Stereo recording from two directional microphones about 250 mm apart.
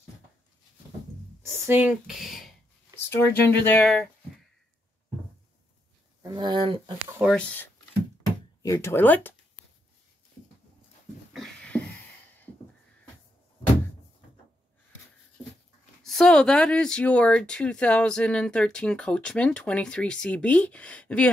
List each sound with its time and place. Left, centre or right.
1.4 s speech: centre
3.1 s speech: centre
6.2 s speech: centre
7.2 s speech: centre
11.3 s wheeze: centre
16.0 s speech: centre